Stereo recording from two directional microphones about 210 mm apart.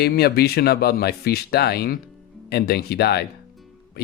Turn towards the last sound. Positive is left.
turn(degrees=50)  # may be behind; listen again after turning